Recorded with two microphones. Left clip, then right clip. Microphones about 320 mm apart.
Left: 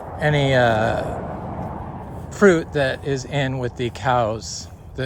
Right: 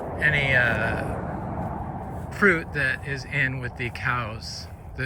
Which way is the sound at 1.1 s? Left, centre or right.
Left.